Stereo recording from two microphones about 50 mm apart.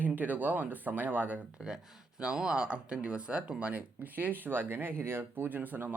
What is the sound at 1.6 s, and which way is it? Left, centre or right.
Speech, centre.